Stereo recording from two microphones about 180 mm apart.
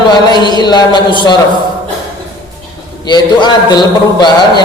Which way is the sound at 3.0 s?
25° left (ahead or behind).